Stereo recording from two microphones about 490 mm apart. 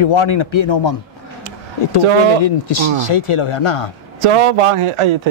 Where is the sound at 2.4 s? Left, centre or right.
Left.